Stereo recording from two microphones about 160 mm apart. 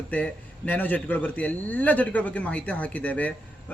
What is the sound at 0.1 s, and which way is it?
A man's voice, 10° left (ahead or behind).